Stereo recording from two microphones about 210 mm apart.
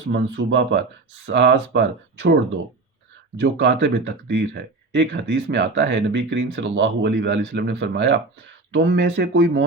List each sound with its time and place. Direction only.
0.1 s speech: 55° right (ahead or behind)
3.3 s speech: 55° right (ahead or behind)